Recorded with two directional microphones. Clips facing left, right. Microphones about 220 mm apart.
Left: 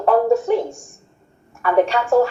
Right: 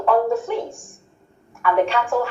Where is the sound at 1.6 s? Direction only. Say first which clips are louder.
Left 2 dB; 40° left (ahead or behind).